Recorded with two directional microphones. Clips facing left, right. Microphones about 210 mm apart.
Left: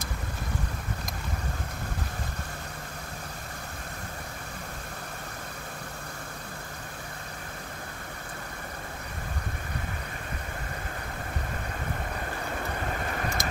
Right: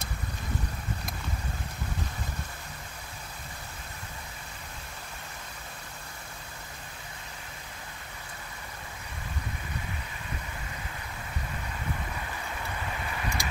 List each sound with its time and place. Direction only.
12.2 s vehicle: 50° left (ahead or behind)